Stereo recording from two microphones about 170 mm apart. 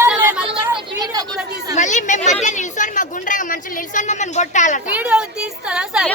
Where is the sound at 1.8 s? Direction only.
45° left (ahead or behind).